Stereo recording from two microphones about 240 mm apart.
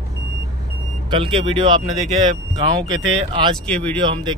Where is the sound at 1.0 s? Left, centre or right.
Right.